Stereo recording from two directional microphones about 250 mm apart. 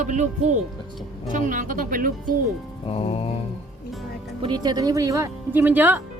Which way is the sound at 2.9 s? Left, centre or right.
Left.